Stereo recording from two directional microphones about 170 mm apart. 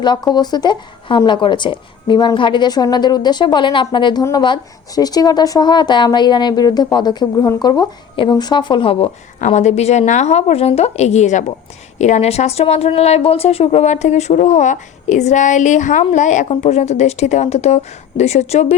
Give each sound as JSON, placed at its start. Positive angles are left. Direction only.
{"t": 0.0, "sound": "speech", "side_deg": 25}
{"t": 9.4, "sound": "speech", "side_deg": 45}